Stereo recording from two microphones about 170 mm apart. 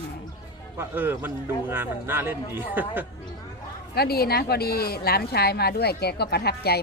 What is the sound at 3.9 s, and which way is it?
Speech, 65° left (ahead or behind).